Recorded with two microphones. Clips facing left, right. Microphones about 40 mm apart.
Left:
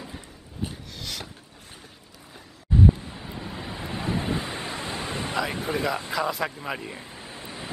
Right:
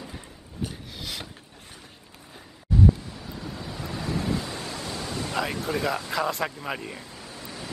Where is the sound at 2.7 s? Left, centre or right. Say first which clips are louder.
Left 1 dB; left.